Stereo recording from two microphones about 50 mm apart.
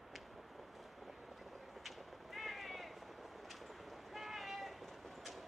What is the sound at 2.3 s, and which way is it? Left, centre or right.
Vehicle, centre.